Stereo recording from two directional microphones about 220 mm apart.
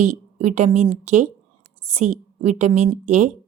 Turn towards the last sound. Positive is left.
turn(degrees=-30)  # may be behind; listen again after turning